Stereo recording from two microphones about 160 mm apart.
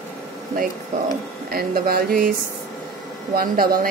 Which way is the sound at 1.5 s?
70° right (ahead or behind).